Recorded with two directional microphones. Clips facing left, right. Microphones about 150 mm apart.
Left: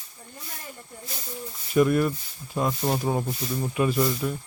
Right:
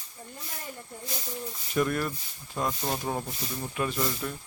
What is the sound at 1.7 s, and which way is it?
Speech, 5° left (ahead or behind).